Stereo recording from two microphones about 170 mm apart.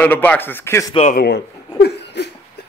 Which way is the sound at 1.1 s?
70° left (ahead or behind).